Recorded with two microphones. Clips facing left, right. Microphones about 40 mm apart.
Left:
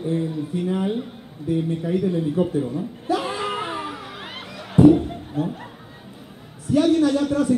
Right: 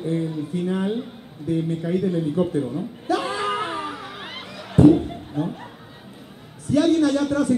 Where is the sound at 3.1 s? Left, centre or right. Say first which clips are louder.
Right 3 dB; centre.